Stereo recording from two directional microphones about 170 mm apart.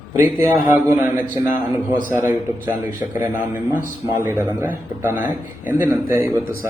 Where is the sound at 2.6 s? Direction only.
10° right (ahead or behind).